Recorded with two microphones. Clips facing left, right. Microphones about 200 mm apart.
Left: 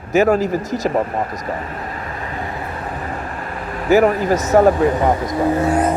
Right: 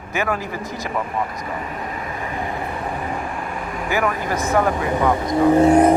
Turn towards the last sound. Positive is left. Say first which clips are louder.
# right 4 dB
turn(degrees=-25)  # may be behind; listen again after turning